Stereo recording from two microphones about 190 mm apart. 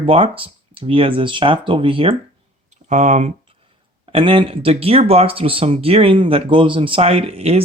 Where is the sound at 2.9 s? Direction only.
40° right (ahead or behind).